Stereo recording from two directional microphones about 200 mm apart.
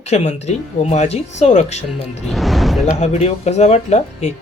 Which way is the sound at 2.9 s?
30° left (ahead or behind).